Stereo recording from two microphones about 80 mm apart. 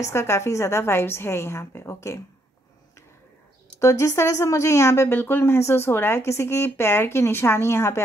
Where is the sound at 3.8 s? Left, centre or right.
Left.